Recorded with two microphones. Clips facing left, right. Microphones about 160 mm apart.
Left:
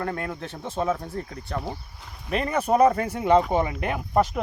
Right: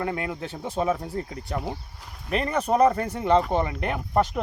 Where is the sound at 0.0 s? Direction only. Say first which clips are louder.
Right 1 dB; 5° right (ahead or behind).